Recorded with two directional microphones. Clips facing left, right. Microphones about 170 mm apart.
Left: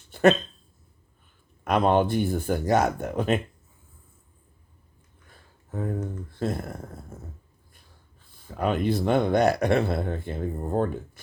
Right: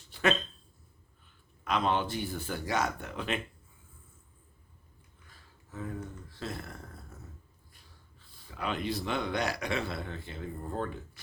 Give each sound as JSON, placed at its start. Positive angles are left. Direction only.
{"t": 0.1, "sound": "dog", "side_deg": 45}
{"t": 1.6, "sound": "speech", "side_deg": 50}
{"t": 5.3, "sound": "speech", "side_deg": 50}
{"t": 8.4, "sound": "speech", "side_deg": 50}